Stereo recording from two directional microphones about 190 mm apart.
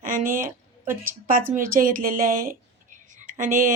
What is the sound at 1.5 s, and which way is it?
A woman's voice, 45° right (ahead or behind).